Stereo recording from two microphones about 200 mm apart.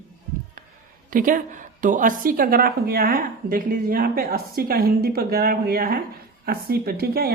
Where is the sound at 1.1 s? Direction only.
45° right (ahead or behind).